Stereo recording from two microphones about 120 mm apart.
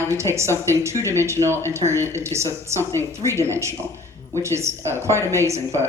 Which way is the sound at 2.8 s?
20° left (ahead or behind).